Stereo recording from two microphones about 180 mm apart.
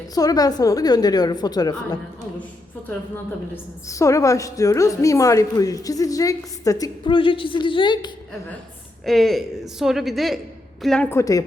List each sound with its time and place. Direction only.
0.1 s a woman's voice: 20° left (ahead or behind)
3.5 s a woman's voice: 15° left (ahead or behind)
9.0 s a woman's voice: centre (ahead or behind); by 11.4 s 15° left (ahead or behind)